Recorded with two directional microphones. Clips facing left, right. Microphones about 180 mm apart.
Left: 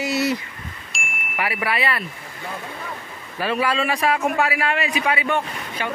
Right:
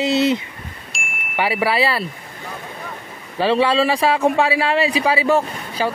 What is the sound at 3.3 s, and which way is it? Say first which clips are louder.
A man's voice: right 6 dB; 30° right (ahead or behind).